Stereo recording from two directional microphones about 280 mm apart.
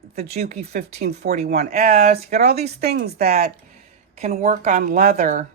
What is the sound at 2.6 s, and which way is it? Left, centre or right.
Speech, right.